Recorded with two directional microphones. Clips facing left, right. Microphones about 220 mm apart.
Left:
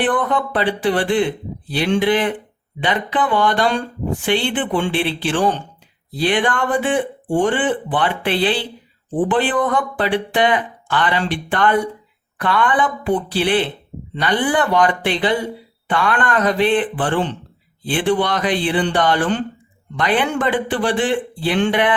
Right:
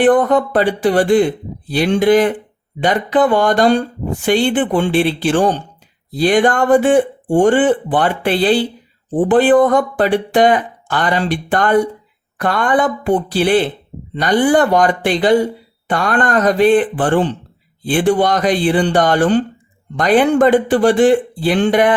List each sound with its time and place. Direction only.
0.0 s speech: 40° right (ahead or behind)